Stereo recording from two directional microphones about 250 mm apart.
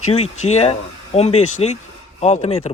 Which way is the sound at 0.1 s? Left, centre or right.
Left.